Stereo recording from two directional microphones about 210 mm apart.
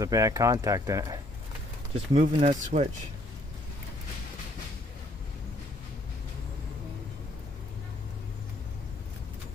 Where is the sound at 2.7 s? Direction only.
30° right (ahead or behind).